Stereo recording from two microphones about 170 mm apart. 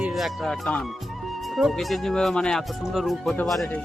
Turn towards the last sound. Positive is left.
turn(degrees=5)  # may be behind; listen again after turning